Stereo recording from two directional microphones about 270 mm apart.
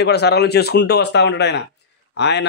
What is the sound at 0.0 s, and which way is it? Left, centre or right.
Speech, left.